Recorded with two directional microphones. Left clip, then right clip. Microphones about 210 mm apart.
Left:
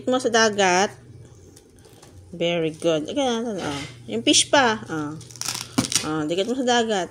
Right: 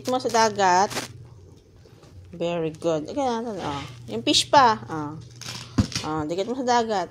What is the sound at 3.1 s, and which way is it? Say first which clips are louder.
Speech: left 2 dB; 10° left (ahead or behind).